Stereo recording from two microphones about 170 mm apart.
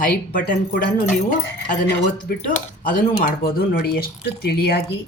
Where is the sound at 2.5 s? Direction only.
55° left (ahead or behind).